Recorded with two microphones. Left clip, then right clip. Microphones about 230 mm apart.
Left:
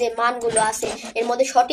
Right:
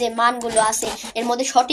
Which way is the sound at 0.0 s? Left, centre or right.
Right.